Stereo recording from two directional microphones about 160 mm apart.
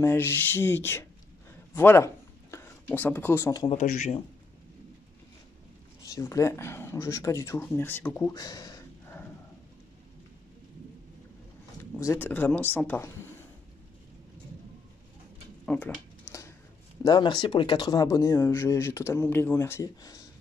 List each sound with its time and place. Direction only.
0.0 s speech: 15° left (ahead or behind)
6.0 s speech: 20° left (ahead or behind)
11.8 s speech: 15° left (ahead or behind)
15.6 s a sound: 5° left (ahead or behind)
17.0 s speech: 25° left (ahead or behind)